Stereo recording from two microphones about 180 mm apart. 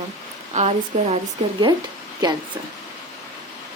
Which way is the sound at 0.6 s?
40° right (ahead or behind).